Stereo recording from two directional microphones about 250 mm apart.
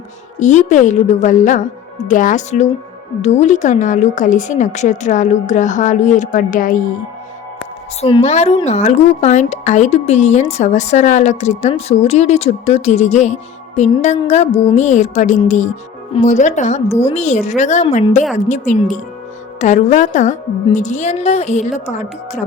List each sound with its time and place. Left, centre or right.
0.3 s speech: left
8.0 s speech: left